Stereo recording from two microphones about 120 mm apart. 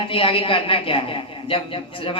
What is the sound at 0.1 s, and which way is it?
A man's voice, 50° left (ahead or behind).